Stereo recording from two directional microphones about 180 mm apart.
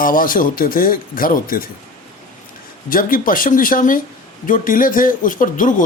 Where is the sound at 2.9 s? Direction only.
50° left (ahead or behind).